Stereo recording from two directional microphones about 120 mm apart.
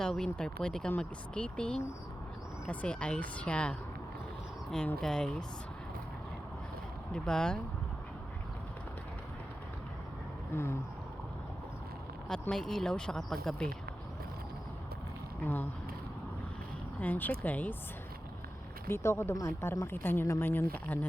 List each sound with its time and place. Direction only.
0.0 s speech: 5° left (ahead or behind)
4.9 s speech: 5° left (ahead or behind)
7.1 s speech: 5° left (ahead or behind)
10.5 s speech: 20° left (ahead or behind)
12.3 s speech: 5° left (ahead or behind)
17.0 s speech: 15° left (ahead or behind)
18.9 s speech: 20° left (ahead or behind)